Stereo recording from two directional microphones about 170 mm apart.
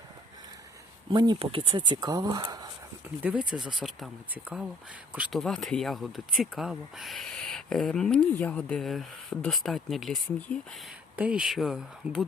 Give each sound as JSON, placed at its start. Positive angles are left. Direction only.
{"t": 1.1, "sound": "speech", "side_deg": -25}
{"t": 3.2, "sound": "speech", "side_deg": -10}